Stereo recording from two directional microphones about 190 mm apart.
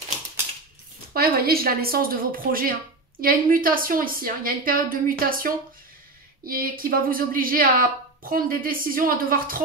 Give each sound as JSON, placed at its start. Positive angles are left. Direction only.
{"t": 1.1, "sound": "a woman's voice", "side_deg": -55}